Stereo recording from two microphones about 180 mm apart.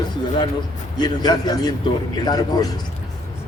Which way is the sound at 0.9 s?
25° left (ahead or behind).